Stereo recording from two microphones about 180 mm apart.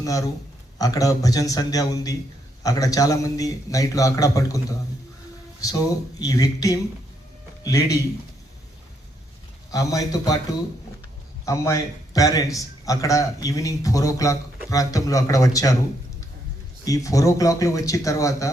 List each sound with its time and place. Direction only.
0.0 s a man's voice: 20° left (ahead or behind)
9.7 s a man's voice: 20° left (ahead or behind)
11.4 s a man's voice: 15° left (ahead or behind)
16.8 s speech: 20° left (ahead or behind)